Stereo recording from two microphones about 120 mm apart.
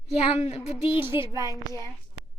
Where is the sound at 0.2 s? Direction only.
60° left (ahead or behind).